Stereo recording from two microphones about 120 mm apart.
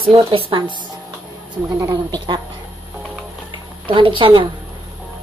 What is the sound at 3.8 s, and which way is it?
Speech, 45° right (ahead or behind).